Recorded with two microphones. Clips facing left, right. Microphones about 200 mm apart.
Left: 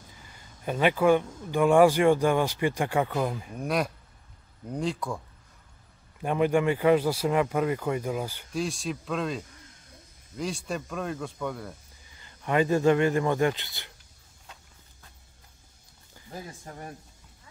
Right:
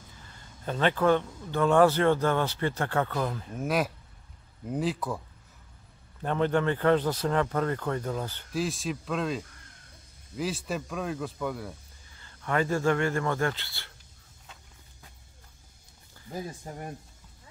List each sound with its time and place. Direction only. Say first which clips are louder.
0.3 s speech: left 2 dB; 10° left (ahead or behind)
3.5 s speech: right 2 dB; centre (ahead or behind)
6.2 s speech: left 2 dB; 10° left (ahead or behind)
8.5 s speech: right 2 dB; centre (ahead or behind)
12.2 s a man's voice: left 3 dB; 15° left (ahead or behind)
16.3 s speech: right 4 dB; 15° right (ahead or behind)